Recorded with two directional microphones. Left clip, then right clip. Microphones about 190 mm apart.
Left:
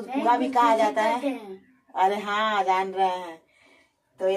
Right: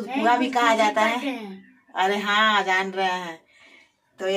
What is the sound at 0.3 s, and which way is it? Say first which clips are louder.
Speech: even; 15° right (ahead or behind).